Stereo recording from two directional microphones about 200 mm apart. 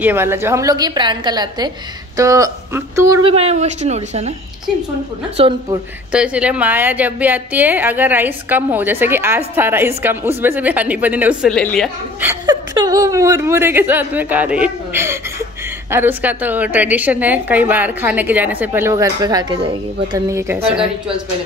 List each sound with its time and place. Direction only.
0.0 s a woman's voice: 10° right (ahead or behind)
3.2 s a woman's voice: 30° right (ahead or behind)
5.4 s a woman's voice: 25° right (ahead or behind)
6.1 s a woman's voice: 5° right (ahead or behind)
11.5 s a woman's voice: 5° left (ahead or behind)
12.2 s chuckle: 10° right (ahead or behind)
12.7 s a woman's voice: 20° right (ahead or behind)